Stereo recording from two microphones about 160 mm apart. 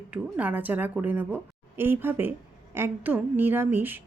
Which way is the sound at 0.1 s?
10° right (ahead or behind).